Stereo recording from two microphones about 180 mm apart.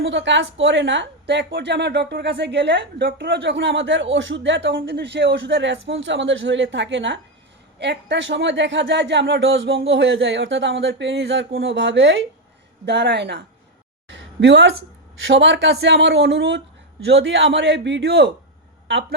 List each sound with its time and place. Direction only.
0.0 s a man's voice: 80° right
5.9 s a woman's voice: 90° right
12.8 s a woman's voice: 70° right (ahead or behind)